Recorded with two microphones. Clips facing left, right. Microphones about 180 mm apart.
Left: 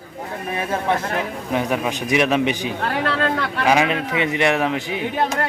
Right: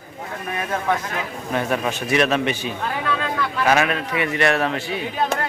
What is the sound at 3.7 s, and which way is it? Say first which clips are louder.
Speech: left 2 dB; 15° left (ahead or behind).